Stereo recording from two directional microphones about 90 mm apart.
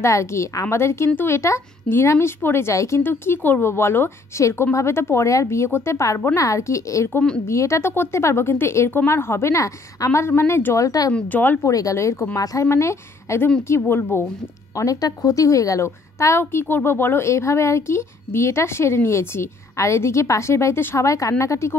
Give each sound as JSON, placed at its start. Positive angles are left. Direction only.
{"t": 0.0, "sound": "a woman's voice", "side_deg": 35}
{"t": 3.0, "sound": "a woman's voice", "side_deg": 25}
{"t": 11.1, "sound": "speech", "side_deg": 20}
{"t": 11.6, "sound": "a woman's voice", "side_deg": 40}
{"t": 14.8, "sound": "a woman's voice", "side_deg": 40}